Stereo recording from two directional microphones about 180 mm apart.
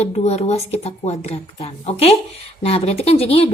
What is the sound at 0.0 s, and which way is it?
Speech, 35° left (ahead or behind).